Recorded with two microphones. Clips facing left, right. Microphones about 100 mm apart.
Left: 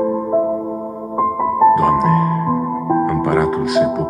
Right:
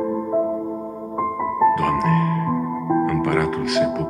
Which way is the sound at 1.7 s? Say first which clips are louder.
Left 6 dB; 40° left (ahead or behind).